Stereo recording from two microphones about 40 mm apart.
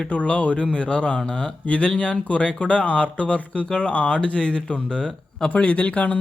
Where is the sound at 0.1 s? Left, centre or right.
Left.